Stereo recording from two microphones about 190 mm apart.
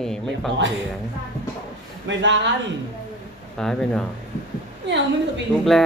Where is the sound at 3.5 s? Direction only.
5° left (ahead or behind).